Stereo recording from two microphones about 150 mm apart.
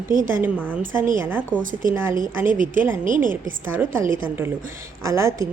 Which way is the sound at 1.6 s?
65° right (ahead or behind).